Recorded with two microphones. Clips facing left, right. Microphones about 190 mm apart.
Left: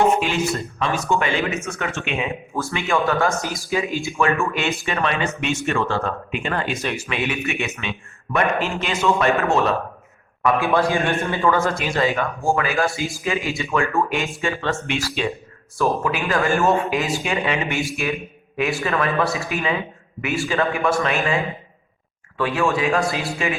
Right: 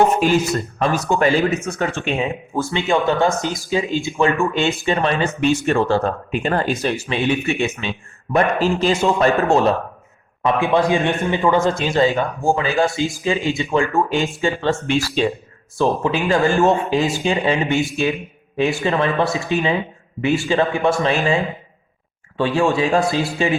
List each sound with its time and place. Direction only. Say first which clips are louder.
0.2 s speech: right 5 dB; 40° right (ahead or behind)
2.6 s speech: right 3 dB; 25° right (ahead or behind)
10.4 s speech: right 2 dB; 20° right (ahead or behind)
22.4 s speech: right 3 dB; 30° right (ahead or behind)